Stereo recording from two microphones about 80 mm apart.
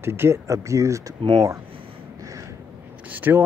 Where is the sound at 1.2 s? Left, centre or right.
Right.